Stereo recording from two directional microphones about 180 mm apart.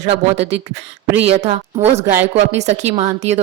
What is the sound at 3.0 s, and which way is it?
Speech, 35° right (ahead or behind).